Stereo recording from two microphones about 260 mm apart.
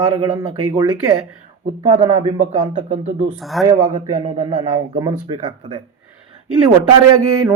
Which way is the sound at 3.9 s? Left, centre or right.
Right.